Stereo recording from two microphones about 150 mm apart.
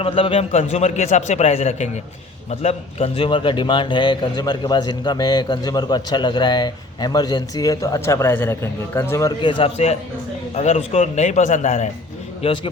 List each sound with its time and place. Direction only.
0.0 s a man's voice: 35° left (ahead or behind); by 9.3 s 15° left (ahead or behind)
9.4 s a man's voice: 35° left (ahead or behind); by 11.9 s 55° left (ahead or behind)
12.4 s a man's voice: 35° left (ahead or behind)